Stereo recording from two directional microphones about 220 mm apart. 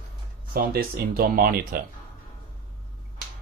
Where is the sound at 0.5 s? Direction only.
45° right (ahead or behind).